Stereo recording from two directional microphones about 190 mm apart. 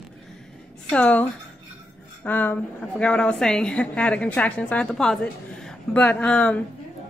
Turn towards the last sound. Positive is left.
turn(degrees=5)  # may be behind; listen again after turning